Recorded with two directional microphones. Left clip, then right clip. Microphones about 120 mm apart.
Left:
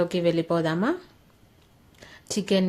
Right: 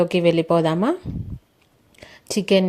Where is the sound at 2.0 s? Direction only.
45° right (ahead or behind).